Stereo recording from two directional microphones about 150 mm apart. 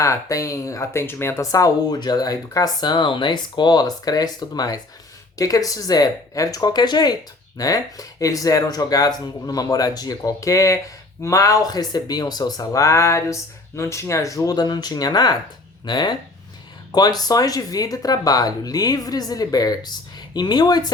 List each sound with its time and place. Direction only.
0.0 s speech: 20° left (ahead or behind)